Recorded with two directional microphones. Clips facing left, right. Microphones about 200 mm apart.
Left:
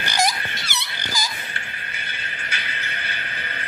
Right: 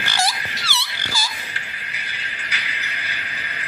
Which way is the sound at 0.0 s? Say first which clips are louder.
Left 1 dB; 15° left (ahead or behind).